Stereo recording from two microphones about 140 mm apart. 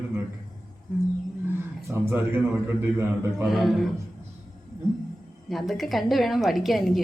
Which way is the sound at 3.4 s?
Centre (ahead or behind).